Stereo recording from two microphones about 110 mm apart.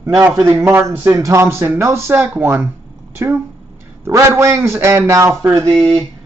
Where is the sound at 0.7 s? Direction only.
20° right (ahead or behind).